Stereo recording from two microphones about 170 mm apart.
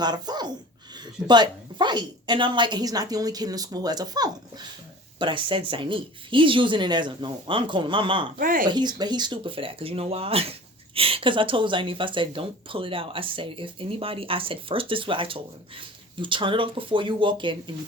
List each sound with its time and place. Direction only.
0.0 s speech: 25° right (ahead or behind)
8.4 s speech: 55° right (ahead or behind)
8.7 s speech: 25° right (ahead or behind)